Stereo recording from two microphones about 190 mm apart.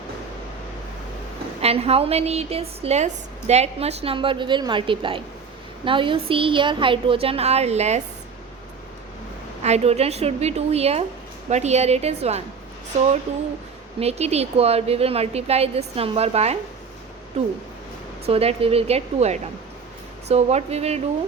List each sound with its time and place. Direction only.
1.6 s a woman's voice: 30° right (ahead or behind)
9.6 s a woman's voice: 35° right (ahead or behind)
18.3 s a woman's voice: 30° right (ahead or behind)